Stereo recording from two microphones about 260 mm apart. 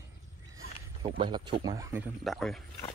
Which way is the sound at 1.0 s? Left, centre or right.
Centre.